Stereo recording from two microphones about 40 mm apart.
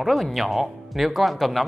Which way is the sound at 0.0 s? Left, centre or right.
Centre.